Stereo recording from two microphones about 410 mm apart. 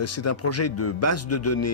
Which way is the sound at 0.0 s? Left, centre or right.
Left.